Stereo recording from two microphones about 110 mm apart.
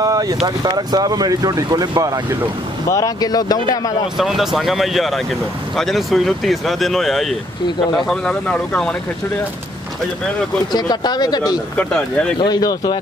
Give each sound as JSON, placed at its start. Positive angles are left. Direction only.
{"t": 0.0, "sound": "a sound", "side_deg": -35}
{"t": 0.5, "sound": "speech", "side_deg": -35}
{"t": 2.9, "sound": "speech", "side_deg": 35}
{"t": 4.2, "sound": "speech", "side_deg": -5}
{"t": 10.7, "sound": "speech", "side_deg": 40}
{"t": 11.7, "sound": "speech", "side_deg": 10}
{"t": 12.4, "sound": "speech", "side_deg": 40}